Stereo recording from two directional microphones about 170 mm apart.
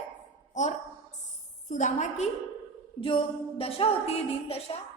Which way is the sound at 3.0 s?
30° left (ahead or behind).